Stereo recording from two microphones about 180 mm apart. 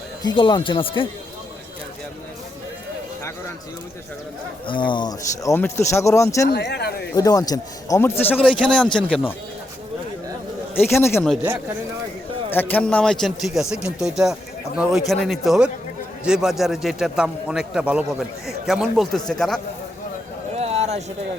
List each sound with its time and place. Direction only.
0.2 s speech: 25° left (ahead or behind)
4.6 s speech: 25° left (ahead or behind)
6.5 s speech: 70° left (ahead or behind)
7.1 s speech: 20° left (ahead or behind)
10.8 s speech: 15° left (ahead or behind)
12.5 s a man's voice: 10° left (ahead or behind)
20.6 s a sound: 35° right (ahead or behind)